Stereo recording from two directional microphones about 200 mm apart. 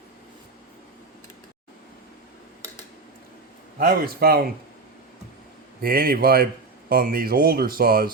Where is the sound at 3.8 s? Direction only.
50° right (ahead or behind).